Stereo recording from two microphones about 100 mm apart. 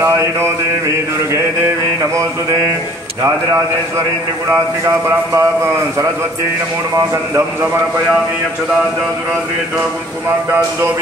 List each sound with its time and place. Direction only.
4.8 s a man's voice: 30° right (ahead or behind)